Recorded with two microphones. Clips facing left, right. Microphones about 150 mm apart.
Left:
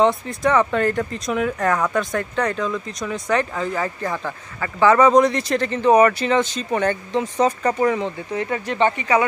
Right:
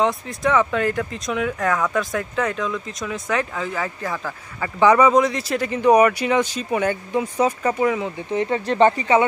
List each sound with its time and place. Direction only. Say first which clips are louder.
0.0 s speech: left 3 dB; centre (ahead or behind)
4.6 s speech: even; 15° right (ahead or behind)
8.3 s speech: right 3 dB; 25° right (ahead or behind)